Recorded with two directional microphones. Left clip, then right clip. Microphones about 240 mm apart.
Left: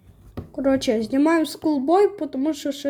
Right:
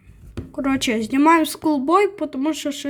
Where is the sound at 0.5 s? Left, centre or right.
Right.